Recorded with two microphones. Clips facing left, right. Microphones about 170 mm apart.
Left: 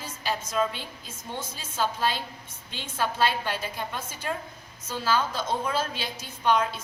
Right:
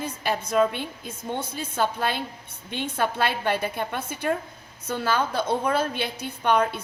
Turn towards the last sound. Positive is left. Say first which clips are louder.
# right 2 dB
turn(degrees=-60)  # may be behind; listen again after turning